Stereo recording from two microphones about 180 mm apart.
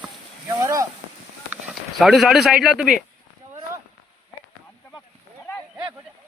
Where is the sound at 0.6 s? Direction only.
15° right (ahead or behind).